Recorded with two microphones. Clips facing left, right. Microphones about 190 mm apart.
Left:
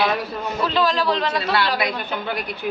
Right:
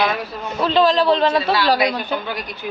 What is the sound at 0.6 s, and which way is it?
A man's voice, 30° right (ahead or behind).